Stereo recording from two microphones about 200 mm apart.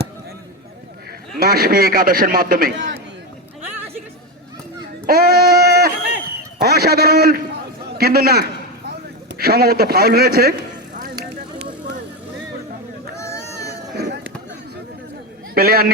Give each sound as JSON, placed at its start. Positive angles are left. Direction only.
{"t": 1.4, "sound": "a man's voice", "side_deg": -50}
{"t": 5.0, "sound": "child singing", "side_deg": -50}
{"t": 6.6, "sound": "a man's voice", "side_deg": -50}
{"t": 13.1, "sound": "a sound", "side_deg": 15}
{"t": 13.9, "sound": "chop", "side_deg": -55}
{"t": 15.5, "sound": "a man's voice", "side_deg": -50}